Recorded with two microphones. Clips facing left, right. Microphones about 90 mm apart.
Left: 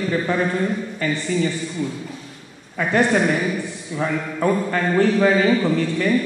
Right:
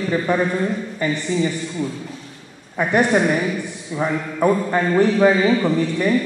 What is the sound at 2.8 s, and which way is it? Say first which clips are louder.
A man's voice: right 1 dB; 15° right (ahead or behind).